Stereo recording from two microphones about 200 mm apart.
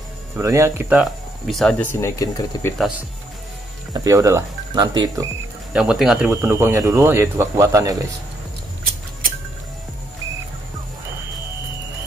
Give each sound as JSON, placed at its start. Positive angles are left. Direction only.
{"t": 0.4, "sound": "speech", "side_deg": -15}
{"t": 3.9, "sound": "speech", "side_deg": -20}
{"t": 5.7, "sound": "speech", "side_deg": -5}